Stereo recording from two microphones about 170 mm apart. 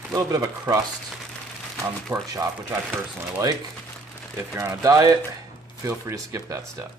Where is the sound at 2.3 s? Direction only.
20° right (ahead or behind).